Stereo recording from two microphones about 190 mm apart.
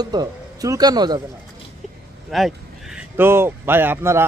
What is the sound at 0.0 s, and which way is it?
Speech, 20° right (ahead or behind).